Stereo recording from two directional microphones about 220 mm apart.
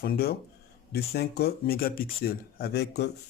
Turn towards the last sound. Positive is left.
turn(degrees=45)  # may be behind; listen again after turning